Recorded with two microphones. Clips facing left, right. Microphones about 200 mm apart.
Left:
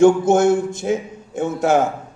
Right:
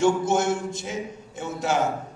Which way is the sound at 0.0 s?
50° left (ahead or behind).